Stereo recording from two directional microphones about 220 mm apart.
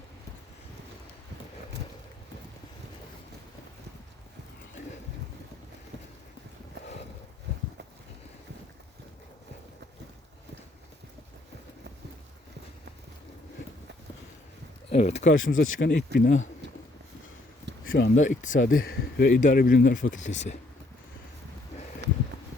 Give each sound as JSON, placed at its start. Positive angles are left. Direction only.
{"t": 14.8, "sound": "speech", "side_deg": 30}
{"t": 15.3, "sound": "speech", "side_deg": 60}
{"t": 16.1, "sound": "speech", "side_deg": 40}
{"t": 17.8, "sound": "speech", "side_deg": 50}
{"t": 18.1, "sound": "speech", "side_deg": 35}
{"t": 22.0, "sound": "a sound", "side_deg": -50}